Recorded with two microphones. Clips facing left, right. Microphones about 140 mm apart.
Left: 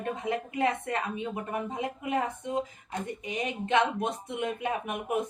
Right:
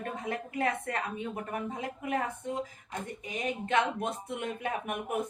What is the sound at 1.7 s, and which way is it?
Speech, 20° left (ahead or behind).